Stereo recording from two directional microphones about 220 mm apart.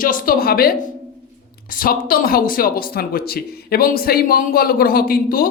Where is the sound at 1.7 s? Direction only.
40° left (ahead or behind).